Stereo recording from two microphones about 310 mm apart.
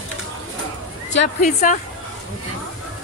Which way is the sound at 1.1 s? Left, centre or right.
Left.